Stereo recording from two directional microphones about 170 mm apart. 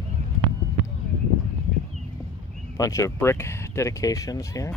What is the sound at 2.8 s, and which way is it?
Speech, 20° left (ahead or behind).